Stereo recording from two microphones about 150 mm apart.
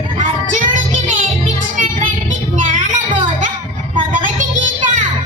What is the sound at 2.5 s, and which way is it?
Child singing, 55° right (ahead or behind).